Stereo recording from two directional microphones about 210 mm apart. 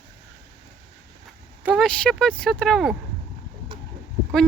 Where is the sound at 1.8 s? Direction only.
5° left (ahead or behind).